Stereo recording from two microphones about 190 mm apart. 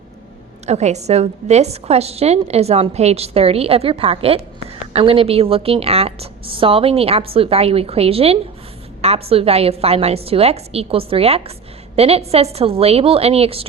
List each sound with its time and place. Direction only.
0.6 s a woman's voice: 35° right (ahead or behind)